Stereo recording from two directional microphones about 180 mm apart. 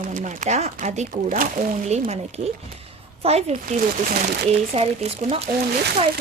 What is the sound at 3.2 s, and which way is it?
Speech, 35° right (ahead or behind).